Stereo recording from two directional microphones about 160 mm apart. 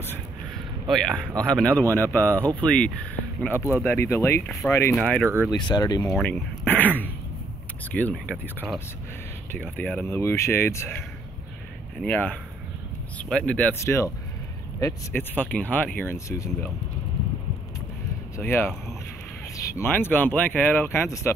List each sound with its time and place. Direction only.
0.8 s a man's voice: 5° left (ahead or behind)
4.9 s a man's voice: 5° left (ahead or behind)
5.5 s speech: 25° left (ahead or behind)
6.1 s speech: 10° left (ahead or behind)
7.9 s speech: 10° left (ahead or behind)
18.4 s speech: 15° left (ahead or behind)